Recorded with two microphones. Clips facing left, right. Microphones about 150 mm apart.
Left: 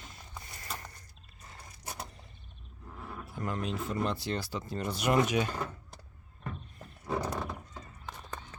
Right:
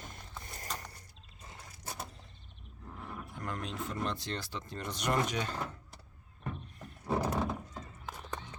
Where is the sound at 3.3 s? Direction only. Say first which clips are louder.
Left 5 dB; 5° left (ahead or behind).